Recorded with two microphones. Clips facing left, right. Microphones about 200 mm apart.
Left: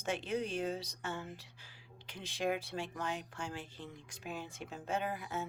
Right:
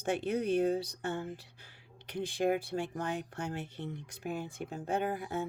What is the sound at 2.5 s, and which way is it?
Speech, 55° right (ahead or behind).